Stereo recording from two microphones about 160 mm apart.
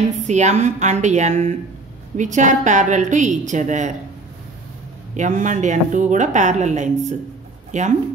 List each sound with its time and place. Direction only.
0.2 s a woman's voice: 45° right (ahead or behind)
5.1 s a woman's voice: 50° right (ahead or behind)